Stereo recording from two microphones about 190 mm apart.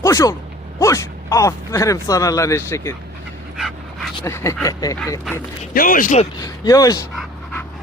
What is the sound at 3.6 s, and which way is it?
Dog, centre (ahead or behind).